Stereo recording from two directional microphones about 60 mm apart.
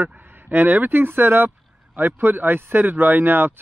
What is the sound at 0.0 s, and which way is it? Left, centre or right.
Speech, right.